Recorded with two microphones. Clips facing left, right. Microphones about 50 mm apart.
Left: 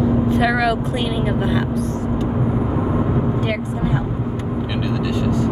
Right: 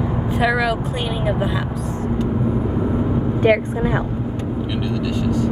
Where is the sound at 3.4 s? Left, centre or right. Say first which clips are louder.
Right 5 dB; right.